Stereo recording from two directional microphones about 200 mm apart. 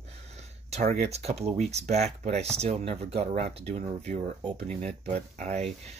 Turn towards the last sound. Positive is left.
turn(degrees=-30)  # may be behind; listen again after turning